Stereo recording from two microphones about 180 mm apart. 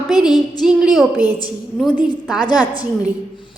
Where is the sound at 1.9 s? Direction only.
25° left (ahead or behind).